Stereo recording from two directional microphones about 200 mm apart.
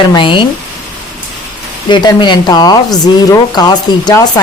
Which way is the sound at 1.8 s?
20° left (ahead or behind).